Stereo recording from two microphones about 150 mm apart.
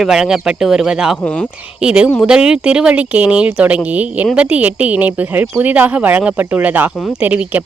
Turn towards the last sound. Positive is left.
turn(degrees=-10)  # may be behind; listen again after turning